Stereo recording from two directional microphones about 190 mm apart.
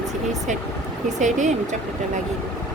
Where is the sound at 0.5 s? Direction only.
40° right (ahead or behind).